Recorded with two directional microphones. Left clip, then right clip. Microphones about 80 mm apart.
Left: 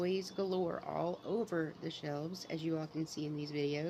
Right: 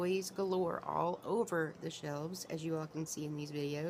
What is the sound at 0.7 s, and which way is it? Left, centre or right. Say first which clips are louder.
Speech: right 2 dB; centre.